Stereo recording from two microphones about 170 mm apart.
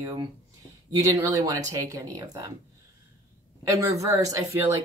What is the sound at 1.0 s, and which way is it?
Speech, 15° right (ahead or behind).